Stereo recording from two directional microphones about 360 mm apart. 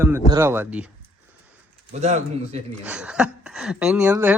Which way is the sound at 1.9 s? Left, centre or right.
Centre.